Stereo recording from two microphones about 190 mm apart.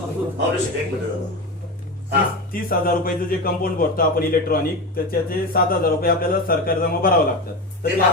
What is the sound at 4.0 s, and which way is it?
A man's voice, 50° left (ahead or behind).